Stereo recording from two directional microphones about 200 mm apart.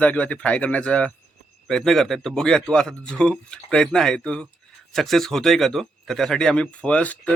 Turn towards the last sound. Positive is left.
turn(degrees=5)  # may be behind; listen again after turning